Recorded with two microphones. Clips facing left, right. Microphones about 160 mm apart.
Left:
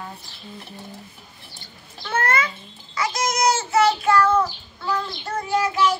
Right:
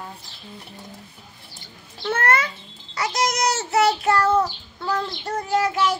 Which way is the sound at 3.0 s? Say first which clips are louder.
Even; 70° right (ahead or behind).